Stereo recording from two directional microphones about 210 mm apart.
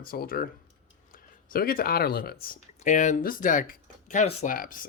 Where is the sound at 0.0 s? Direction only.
45° left (ahead or behind).